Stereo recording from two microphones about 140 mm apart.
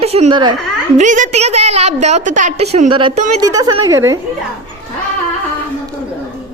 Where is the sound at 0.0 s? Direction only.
45° right (ahead or behind).